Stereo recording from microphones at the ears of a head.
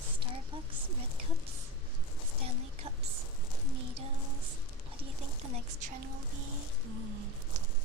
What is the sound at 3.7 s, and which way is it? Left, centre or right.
Child singing, right.